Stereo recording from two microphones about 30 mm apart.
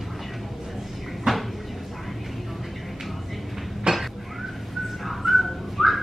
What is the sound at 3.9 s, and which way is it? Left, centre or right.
Dishes, right.